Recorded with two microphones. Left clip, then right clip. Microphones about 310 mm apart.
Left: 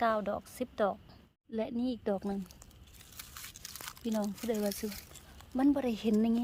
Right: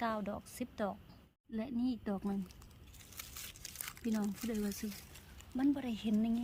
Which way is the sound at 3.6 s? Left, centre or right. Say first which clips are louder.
Left 3 dB; centre.